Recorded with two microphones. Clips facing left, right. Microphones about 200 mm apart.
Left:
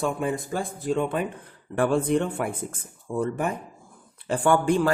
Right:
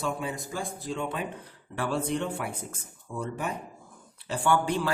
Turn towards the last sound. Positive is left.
turn(degrees=50)  # may be behind; listen again after turning